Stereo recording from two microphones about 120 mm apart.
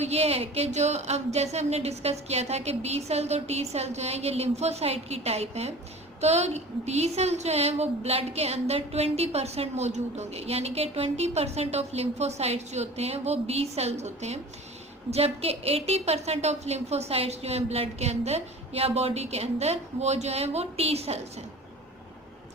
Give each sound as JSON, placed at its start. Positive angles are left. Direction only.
{"t": 0.0, "sound": "a woman's voice", "side_deg": -60}
{"t": 15.1, "sound": "a woman's voice", "side_deg": -55}